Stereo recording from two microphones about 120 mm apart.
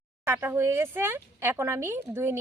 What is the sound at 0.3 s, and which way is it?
Speech, 20° right (ahead or behind).